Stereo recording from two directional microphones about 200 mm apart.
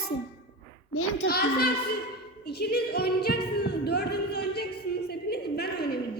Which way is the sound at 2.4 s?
50° left (ahead or behind).